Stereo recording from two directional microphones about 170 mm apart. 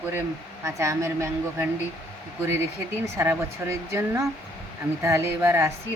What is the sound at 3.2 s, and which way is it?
Speech, 15° right (ahead or behind).